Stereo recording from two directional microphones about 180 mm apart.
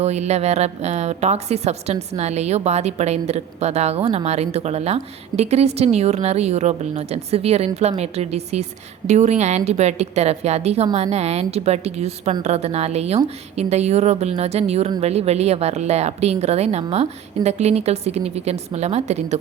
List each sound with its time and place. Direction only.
0.0 s a woman's voice: 40° right (ahead or behind)